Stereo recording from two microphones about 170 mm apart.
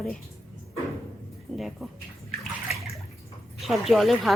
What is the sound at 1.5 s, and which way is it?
Speech, centre (ahead or behind).